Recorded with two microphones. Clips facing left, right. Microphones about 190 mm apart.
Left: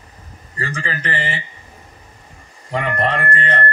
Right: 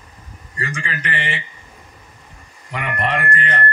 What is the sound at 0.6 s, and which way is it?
Speech, 35° left (ahead or behind).